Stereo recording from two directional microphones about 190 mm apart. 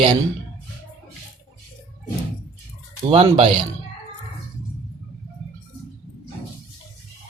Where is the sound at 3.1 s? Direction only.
30° right (ahead or behind).